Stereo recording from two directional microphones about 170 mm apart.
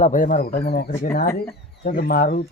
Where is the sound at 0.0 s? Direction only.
50° left (ahead or behind).